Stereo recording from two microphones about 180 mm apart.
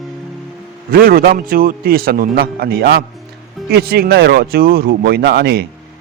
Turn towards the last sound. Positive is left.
turn(degrees=-65)  # may be behind; listen again after turning